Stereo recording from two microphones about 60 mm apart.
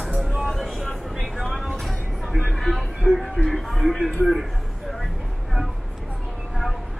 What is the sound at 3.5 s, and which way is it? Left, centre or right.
Speech, centre.